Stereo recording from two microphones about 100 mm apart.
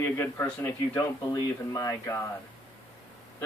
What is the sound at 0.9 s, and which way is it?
Speech, 45° left (ahead or behind).